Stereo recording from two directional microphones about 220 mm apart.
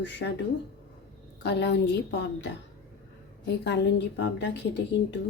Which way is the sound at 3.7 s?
50° left (ahead or behind).